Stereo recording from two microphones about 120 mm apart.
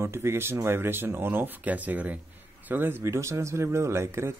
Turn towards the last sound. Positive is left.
turn(degrees=-20)  # may be behind; listen again after turning